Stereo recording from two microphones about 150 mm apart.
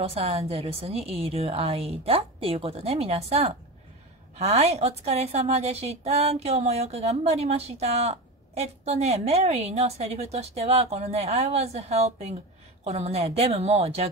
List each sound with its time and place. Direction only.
0.0 s a woman's voice: 40° right (ahead or behind)